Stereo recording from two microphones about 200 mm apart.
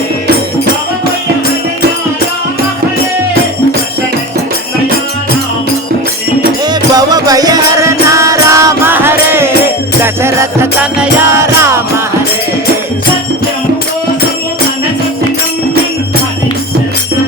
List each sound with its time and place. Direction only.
6.7 s music: 20° right (ahead or behind)